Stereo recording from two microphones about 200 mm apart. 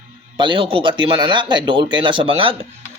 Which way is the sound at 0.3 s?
25° right (ahead or behind).